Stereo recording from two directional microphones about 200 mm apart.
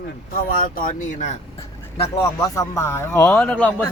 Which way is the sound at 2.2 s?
15° left (ahead or behind).